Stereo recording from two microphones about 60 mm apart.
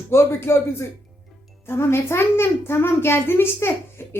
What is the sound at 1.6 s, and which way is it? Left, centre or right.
A child's voice, left.